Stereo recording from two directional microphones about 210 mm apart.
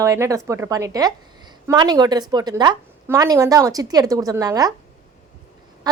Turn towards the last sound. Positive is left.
turn(degrees=-20)  # may be behind; listen again after turning